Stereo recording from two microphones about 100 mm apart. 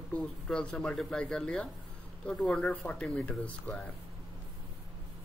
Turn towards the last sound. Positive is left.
turn(degrees=5)  # may be behind; listen again after turning